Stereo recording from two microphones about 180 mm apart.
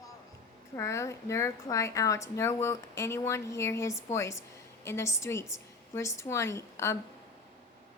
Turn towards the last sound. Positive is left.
turn(degrees=15)  # may be behind; listen again after turning